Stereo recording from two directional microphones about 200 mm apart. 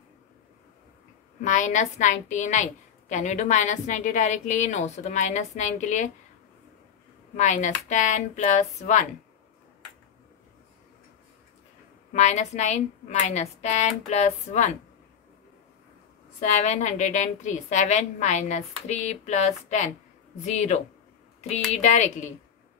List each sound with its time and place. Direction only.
1.4 s a woman's voice: 40° left (ahead or behind)
7.3 s a woman's voice: 35° left (ahead or behind)
12.1 s a woman's voice: 35° left (ahead or behind)
16.3 s a woman's voice: 35° left (ahead or behind)
21.8 s a woman's voice: 35° left (ahead or behind)